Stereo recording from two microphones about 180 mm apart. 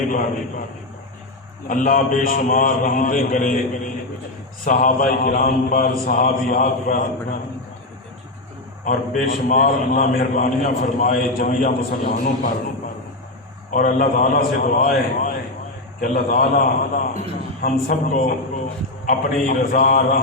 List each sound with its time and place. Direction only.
0.1 s a man's voice: 45° left (ahead or behind)
1.6 s a man's voice: 50° left (ahead or behind)
4.6 s a man's voice: 50° left (ahead or behind)
8.8 s a man's voice: 50° left (ahead or behind)
13.7 s a man's voice: 50° left (ahead or behind)